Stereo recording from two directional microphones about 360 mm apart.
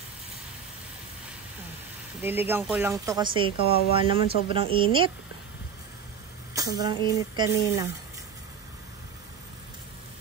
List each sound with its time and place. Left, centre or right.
2.2 s speech: centre
3.5 s speech: left
3.9 s a woman's voice: centre
6.5 s a woman's voice: centre